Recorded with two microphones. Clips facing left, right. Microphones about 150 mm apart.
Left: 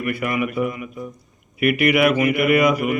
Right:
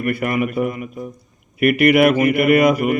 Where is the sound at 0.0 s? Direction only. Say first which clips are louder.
Right 3 dB; 45° right (ahead or behind).